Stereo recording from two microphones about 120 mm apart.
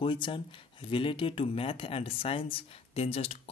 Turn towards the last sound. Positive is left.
turn(degrees=55)  # may be behind; listen again after turning